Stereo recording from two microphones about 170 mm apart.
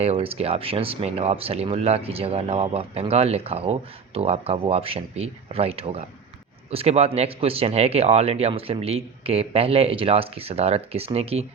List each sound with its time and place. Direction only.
0.0 s speech: 35° right (ahead or behind)